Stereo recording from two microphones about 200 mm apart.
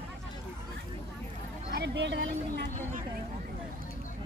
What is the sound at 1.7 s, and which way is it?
Speech, 60° right (ahead or behind).